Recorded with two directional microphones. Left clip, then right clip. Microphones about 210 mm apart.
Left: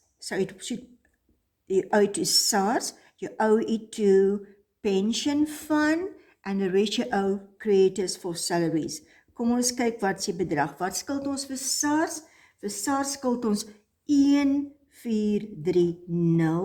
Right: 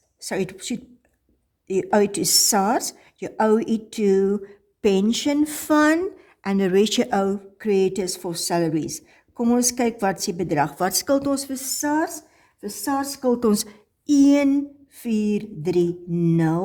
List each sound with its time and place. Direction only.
0.2 s a woman's voice: 35° right (ahead or behind)
13.5 s speech: 50° right (ahead or behind)